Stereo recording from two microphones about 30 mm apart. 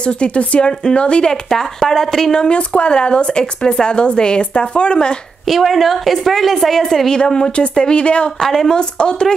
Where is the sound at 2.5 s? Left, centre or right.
Left.